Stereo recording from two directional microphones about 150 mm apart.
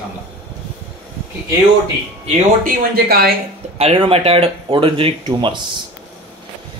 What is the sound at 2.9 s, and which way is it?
Speech, 90° right.